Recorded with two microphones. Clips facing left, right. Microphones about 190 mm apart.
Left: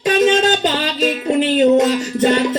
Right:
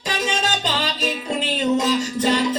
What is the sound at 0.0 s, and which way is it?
Music, 60° left (ahead or behind).